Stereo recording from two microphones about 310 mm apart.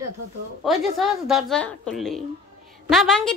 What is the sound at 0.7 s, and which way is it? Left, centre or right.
A woman's voice, centre.